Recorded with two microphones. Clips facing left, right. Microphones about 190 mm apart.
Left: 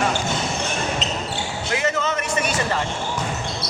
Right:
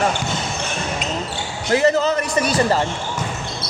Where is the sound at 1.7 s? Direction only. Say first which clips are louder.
Right 7 dB; 35° right (ahead or behind).